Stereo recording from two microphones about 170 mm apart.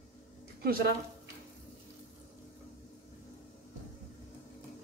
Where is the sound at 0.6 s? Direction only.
60° right (ahead or behind).